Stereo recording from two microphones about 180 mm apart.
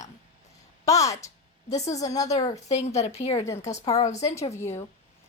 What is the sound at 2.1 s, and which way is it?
Speech, 20° left (ahead or behind).